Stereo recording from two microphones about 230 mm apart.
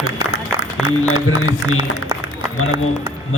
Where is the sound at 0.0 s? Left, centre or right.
Left.